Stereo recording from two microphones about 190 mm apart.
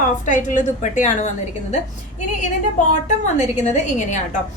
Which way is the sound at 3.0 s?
40° left (ahead or behind).